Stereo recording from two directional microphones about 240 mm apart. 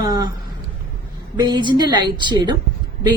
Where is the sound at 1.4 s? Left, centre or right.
Centre.